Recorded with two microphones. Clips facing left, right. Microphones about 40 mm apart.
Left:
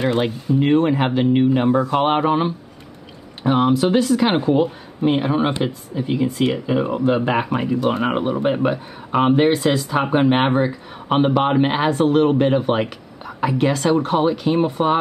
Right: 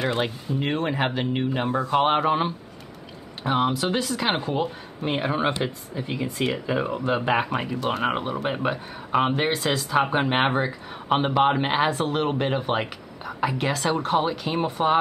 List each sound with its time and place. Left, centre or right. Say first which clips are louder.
0.0 s speech: left 6 dB; centre
7.7 s speech: left 6 dB; centre